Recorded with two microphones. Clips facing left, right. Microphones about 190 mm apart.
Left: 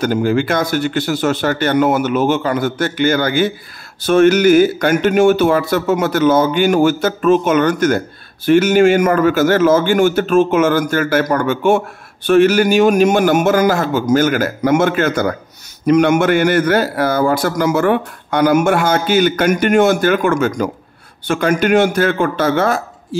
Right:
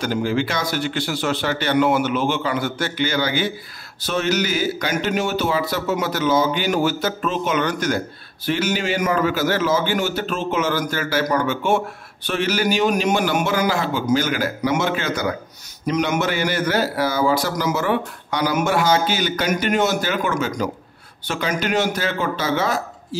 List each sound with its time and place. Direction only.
0.0 s a man's voice: 50° left (ahead or behind)